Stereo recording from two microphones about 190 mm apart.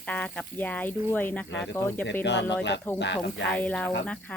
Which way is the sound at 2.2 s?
65° left (ahead or behind).